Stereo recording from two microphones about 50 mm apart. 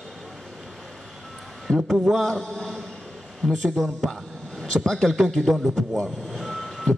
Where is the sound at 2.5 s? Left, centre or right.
Centre.